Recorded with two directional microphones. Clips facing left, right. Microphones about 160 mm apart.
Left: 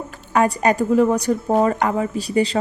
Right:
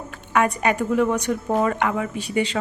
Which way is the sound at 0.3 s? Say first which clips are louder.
Left 3 dB; 35° left (ahead or behind).